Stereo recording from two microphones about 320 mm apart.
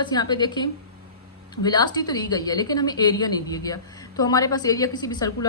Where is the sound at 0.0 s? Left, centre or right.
Centre.